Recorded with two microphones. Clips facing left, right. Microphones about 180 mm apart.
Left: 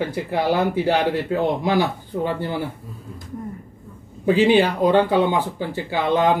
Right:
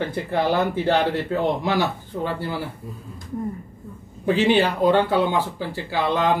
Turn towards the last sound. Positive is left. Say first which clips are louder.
# left 2 dB
turn(degrees=20)  # may be behind; listen again after turning